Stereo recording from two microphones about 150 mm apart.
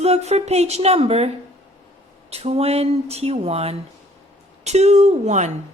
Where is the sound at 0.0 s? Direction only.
45° right (ahead or behind).